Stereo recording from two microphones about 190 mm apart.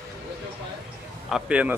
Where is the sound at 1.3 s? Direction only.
5° right (ahead or behind).